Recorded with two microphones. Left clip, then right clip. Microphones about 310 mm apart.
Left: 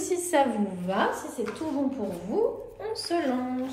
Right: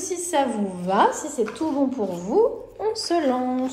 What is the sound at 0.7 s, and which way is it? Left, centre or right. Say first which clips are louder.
A woman's voice: right 11 dB; centre.